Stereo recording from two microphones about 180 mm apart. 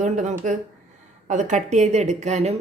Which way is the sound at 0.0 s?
40° right (ahead or behind).